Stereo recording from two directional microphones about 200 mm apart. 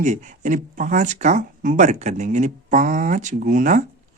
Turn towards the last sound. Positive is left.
turn(degrees=-40)  # may be behind; listen again after turning